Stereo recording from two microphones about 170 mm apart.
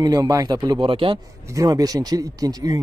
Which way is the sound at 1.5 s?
20° right (ahead or behind).